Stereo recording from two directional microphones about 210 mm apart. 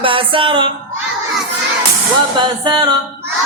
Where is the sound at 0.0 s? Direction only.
25° right (ahead or behind).